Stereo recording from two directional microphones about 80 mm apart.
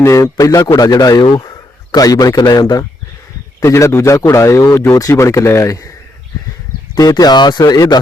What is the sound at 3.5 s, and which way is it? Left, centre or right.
Speech, left.